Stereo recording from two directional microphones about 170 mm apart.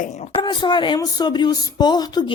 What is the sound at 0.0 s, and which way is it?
Speech, 45° left (ahead or behind).